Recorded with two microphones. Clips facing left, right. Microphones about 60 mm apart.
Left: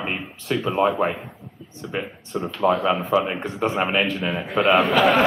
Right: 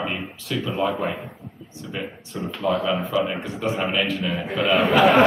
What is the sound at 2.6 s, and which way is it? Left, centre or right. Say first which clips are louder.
Speech: left 3 dB; left.